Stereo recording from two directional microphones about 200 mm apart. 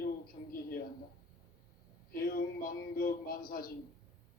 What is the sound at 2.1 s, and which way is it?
A man's voice, 45° left (ahead or behind).